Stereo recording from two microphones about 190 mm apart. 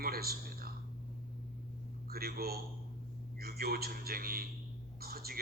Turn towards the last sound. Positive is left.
turn(degrees=-55)  # may be behind; listen again after turning